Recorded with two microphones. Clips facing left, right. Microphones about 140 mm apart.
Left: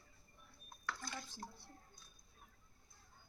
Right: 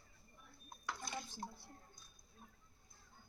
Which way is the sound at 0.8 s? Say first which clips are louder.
Right 1 dB; 20° right (ahead or behind).